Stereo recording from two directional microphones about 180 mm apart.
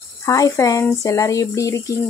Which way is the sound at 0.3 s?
20° left (ahead or behind).